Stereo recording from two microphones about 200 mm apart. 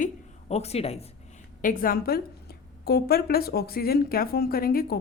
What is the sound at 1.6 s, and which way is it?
A woman's voice, 45° left (ahead or behind).